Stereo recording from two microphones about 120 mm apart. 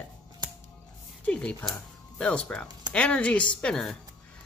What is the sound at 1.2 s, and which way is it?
Speech, 10° left (ahead or behind).